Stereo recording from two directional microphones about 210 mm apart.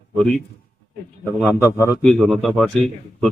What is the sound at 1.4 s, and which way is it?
Speech, centre (ahead or behind).